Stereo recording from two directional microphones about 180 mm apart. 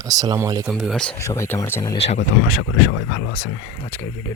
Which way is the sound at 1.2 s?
15° left (ahead or behind).